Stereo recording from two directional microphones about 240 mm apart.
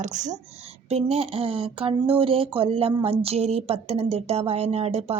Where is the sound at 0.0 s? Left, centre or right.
Right.